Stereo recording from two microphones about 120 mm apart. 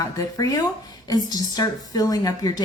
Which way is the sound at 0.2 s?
30° left (ahead or behind).